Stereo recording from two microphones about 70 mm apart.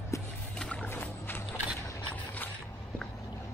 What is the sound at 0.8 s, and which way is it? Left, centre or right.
Boat, left.